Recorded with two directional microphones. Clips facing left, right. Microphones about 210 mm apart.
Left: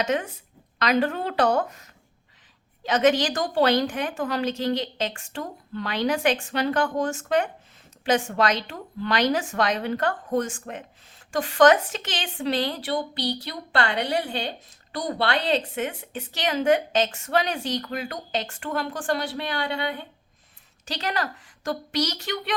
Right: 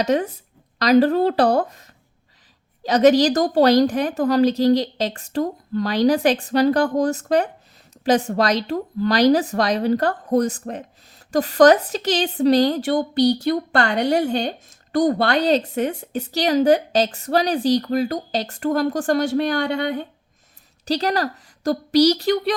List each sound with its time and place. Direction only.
0.0 s a woman's voice: 35° right (ahead or behind)